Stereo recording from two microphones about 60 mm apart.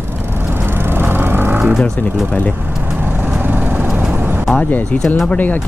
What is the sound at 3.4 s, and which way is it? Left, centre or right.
Vehicle, right.